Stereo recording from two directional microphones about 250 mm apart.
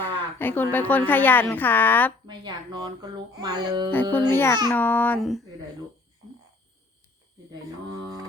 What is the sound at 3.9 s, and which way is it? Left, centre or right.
A woman's voice, centre.